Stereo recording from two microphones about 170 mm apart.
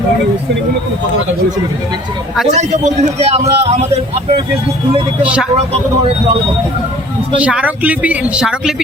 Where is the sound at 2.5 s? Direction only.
40° right (ahead or behind).